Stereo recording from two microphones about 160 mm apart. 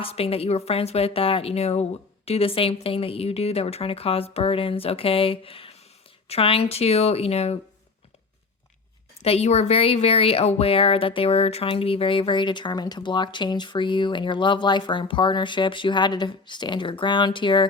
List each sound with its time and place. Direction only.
0.0 s a woman's voice: 40° left (ahead or behind)
9.2 s a woman's voice: 40° left (ahead or behind)